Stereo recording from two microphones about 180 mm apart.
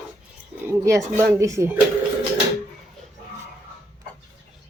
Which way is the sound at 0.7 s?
15° right (ahead or behind).